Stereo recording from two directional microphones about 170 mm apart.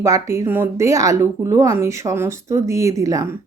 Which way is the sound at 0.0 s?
15° right (ahead or behind).